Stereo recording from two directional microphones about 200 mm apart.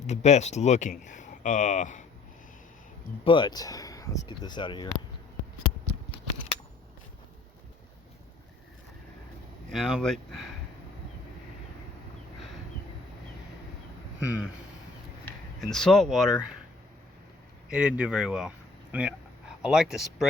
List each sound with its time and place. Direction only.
0.1 s speech: 35° left (ahead or behind)
3.2 s speech: 25° left (ahead or behind)
9.6 s speech: centre (ahead or behind)
14.2 s speech: 5° right (ahead or behind)
15.7 s speech: 5° left (ahead or behind)
17.7 s speech: 5° right (ahead or behind)